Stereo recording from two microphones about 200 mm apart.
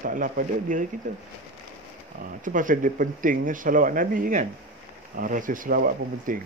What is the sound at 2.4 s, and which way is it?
Speech, 40° right (ahead or behind).